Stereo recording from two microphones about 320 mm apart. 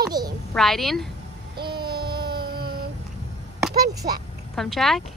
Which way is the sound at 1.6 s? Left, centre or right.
Right.